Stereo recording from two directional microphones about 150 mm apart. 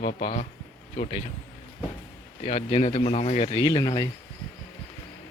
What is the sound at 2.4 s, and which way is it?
Speech, 45° left (ahead or behind).